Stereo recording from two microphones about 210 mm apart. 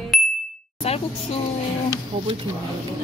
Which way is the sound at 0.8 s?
30° left (ahead or behind).